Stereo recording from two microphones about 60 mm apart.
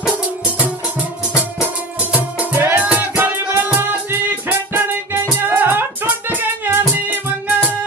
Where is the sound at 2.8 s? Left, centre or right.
Right.